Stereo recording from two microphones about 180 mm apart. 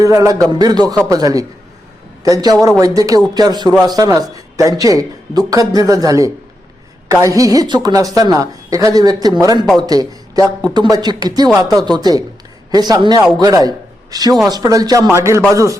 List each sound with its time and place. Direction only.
0.0 s a woman's voice: 20° right (ahead or behind)